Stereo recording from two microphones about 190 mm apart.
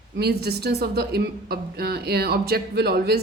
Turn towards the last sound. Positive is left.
turn(degrees=-55)  # may be behind; listen again after turning